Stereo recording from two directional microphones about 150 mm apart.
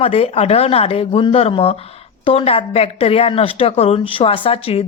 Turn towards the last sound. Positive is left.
turn(degrees=40)  # may be behind; listen again after turning